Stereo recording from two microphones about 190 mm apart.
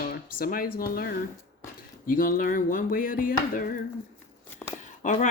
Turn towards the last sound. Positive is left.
turn(degrees=40)  # may be behind; listen again after turning